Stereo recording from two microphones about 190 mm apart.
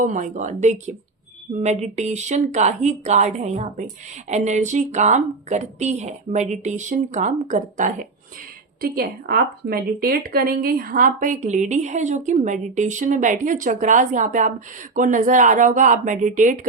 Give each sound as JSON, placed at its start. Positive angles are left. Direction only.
{"t": 0.0, "sound": "a woman's voice", "side_deg": -40}
{"t": 8.8, "sound": "a woman's voice", "side_deg": -50}